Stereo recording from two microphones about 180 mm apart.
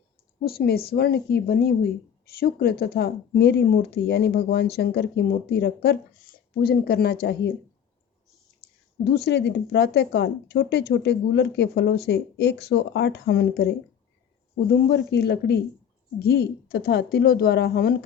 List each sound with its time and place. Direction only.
0.4 s speech: 60° left (ahead or behind)
9.0 s speech: 65° left (ahead or behind)
14.8 s speech: 65° left (ahead or behind)